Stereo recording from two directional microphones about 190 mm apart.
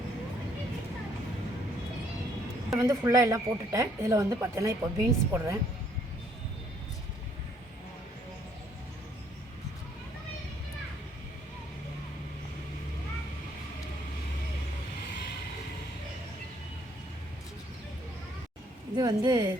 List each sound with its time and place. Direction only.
2.6 s a woman's voice: 15° right (ahead or behind)
18.9 s a woman's voice: 20° right (ahead or behind)